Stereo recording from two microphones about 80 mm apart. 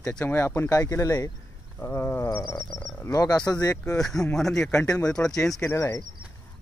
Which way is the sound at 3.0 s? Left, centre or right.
Left.